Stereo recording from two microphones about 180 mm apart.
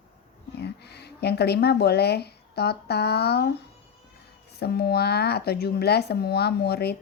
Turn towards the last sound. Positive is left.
turn(degrees=65)  # may be behind; listen again after turning